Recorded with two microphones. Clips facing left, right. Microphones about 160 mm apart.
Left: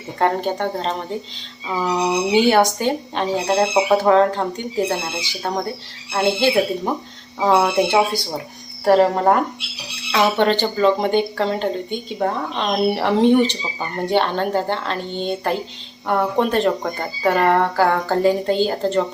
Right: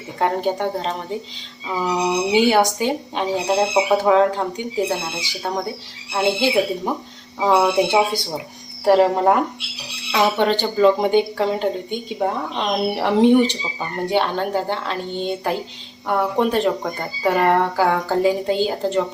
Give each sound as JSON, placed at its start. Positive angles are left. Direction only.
{"t": 0.2, "sound": "speech", "side_deg": -10}
{"t": 10.1, "sound": "speech", "side_deg": -15}
{"t": 10.4, "sound": "speech", "side_deg": -5}
{"t": 14.0, "sound": "speech", "side_deg": -5}